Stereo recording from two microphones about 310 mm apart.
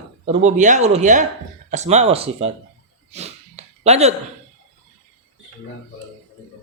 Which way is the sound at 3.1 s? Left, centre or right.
Right.